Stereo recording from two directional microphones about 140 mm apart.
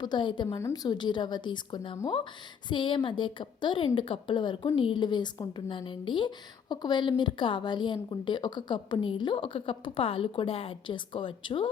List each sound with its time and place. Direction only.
0.0 s a woman's voice: 35° left (ahead or behind)
0.4 s a woman's voice: 20° left (ahead or behind); by 11.7 s 35° left (ahead or behind)